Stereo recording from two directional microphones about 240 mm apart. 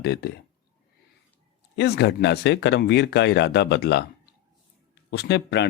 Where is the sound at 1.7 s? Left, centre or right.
Left.